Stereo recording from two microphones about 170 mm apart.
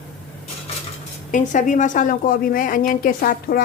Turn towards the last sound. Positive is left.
turn(degrees=55)  # may be behind; listen again after turning